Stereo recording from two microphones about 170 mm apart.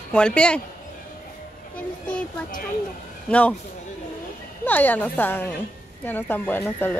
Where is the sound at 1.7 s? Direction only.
5° left (ahead or behind).